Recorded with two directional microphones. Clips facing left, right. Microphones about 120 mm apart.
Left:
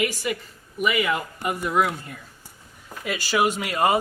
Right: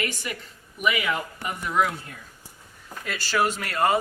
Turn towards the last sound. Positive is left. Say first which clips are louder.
# left 2 dB
turn(degrees=10)  # may be behind; listen again after turning